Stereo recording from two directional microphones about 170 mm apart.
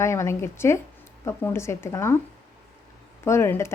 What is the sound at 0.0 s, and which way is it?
A woman's voice, 15° left (ahead or behind).